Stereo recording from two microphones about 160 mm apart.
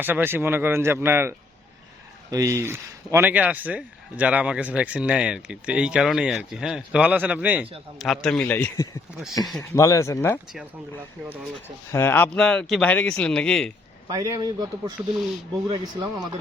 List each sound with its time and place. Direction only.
0.0 s a man's voice: 15° right (ahead or behind); by 8.9 s 10° left (ahead or behind)
9.4 s a man's voice: centre (ahead or behind)
9.7 s speech: 20° left (ahead or behind)
11.9 s a man's voice: 15° left (ahead or behind)
14.1 s a man's voice: 25° right (ahead or behind)